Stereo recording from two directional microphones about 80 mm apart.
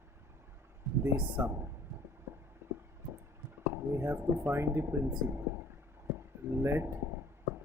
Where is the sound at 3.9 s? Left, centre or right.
Right.